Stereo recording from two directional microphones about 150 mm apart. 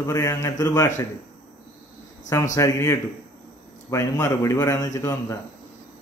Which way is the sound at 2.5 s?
20° left (ahead or behind).